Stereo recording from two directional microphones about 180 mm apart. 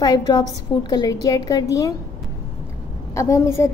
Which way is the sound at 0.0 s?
20° left (ahead or behind).